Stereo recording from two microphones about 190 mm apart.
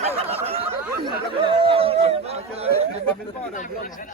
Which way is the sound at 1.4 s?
30° right (ahead or behind).